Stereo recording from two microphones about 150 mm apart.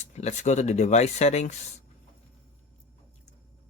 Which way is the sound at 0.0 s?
50° left (ahead or behind).